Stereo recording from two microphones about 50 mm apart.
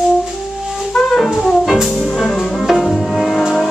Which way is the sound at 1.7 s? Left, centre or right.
Centre.